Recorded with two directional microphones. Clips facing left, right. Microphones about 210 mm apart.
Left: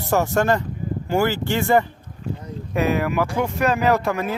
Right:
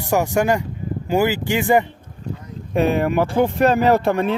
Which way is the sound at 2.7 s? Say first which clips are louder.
Right 3 dB; 30° right (ahead or behind).